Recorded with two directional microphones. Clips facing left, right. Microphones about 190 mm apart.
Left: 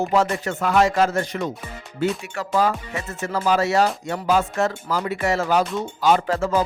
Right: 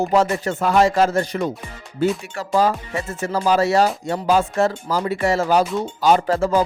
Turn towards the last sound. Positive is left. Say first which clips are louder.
# right 3 dB
turn(degrees=-35)  # may be behind; listen again after turning